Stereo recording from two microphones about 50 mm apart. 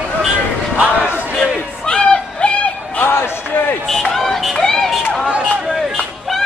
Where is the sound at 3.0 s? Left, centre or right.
Left.